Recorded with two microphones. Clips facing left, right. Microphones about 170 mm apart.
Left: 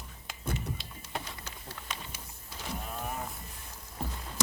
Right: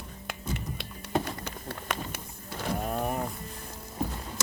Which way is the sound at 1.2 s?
60° right (ahead or behind).